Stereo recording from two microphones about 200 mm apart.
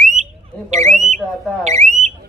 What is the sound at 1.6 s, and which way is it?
Speech, 35° right (ahead or behind).